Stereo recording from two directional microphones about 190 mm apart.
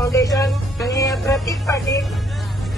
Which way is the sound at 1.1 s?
Centre (ahead or behind).